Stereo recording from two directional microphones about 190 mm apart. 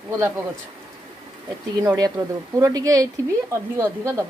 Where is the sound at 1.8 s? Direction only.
20° right (ahead or behind).